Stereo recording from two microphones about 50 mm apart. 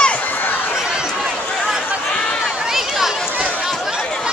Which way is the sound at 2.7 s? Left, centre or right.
Centre.